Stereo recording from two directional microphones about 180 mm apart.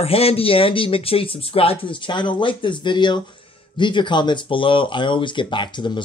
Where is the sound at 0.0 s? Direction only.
35° left (ahead or behind).